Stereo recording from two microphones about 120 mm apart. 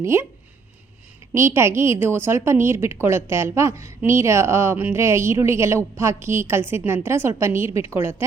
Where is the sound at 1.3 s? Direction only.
20° right (ahead or behind).